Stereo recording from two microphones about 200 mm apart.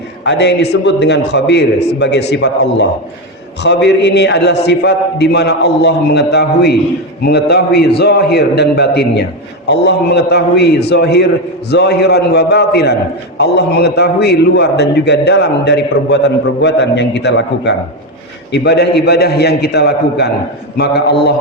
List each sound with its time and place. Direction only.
0.3 s a man's voice: 60° left (ahead or behind)